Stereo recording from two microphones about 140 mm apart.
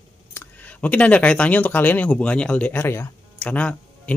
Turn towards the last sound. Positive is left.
turn(degrees=10)  # may be behind; listen again after turning